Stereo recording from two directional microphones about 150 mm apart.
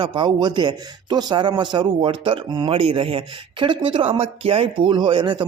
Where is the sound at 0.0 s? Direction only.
30° right (ahead or behind).